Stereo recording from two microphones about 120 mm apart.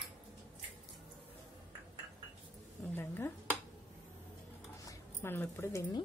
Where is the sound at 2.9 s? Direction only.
20° left (ahead or behind).